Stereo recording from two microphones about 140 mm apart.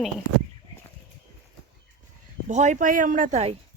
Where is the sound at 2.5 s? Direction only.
55° right (ahead or behind).